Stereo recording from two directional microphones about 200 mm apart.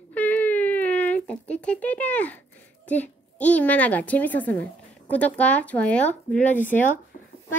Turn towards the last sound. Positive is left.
turn(degrees=10)  # may be behind; listen again after turning